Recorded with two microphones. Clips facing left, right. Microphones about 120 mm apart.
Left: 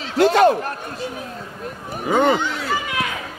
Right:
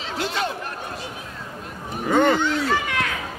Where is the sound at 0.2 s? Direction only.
50° left (ahead or behind).